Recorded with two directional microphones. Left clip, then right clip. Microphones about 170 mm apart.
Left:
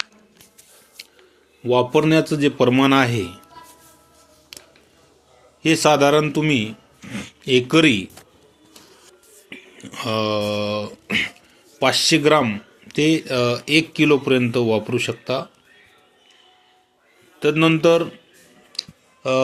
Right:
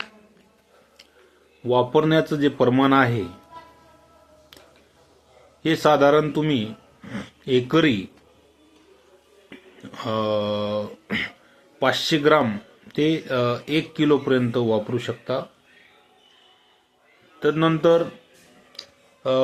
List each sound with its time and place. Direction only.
1.6 s speech: 25° left (ahead or behind)
5.6 s speech: 25° left (ahead or behind)
9.5 s a sound: 30° left (ahead or behind)
11.8 s speech: 25° left (ahead or behind)
17.4 s speech: 25° left (ahead or behind)
18.7 s clicking: 25° left (ahead or behind)